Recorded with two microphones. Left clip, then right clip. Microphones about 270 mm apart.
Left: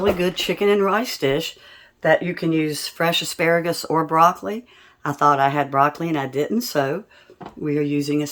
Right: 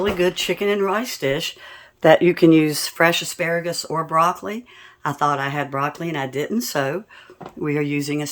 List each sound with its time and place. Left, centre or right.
0.0 s speech: centre
2.0 s speech: right
3.1 s speech: centre